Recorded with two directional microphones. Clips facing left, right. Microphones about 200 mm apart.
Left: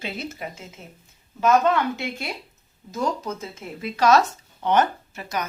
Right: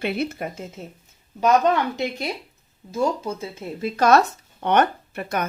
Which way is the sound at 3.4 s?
30° right (ahead or behind).